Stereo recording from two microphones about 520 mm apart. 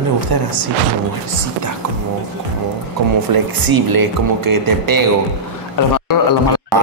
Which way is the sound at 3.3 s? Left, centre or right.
Right.